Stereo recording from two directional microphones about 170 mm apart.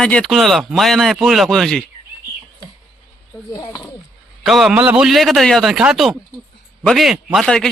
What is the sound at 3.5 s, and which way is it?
Speech, 20° left (ahead or behind).